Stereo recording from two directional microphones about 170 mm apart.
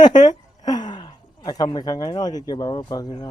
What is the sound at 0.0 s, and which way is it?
A woman's voice, 25° left (ahead or behind).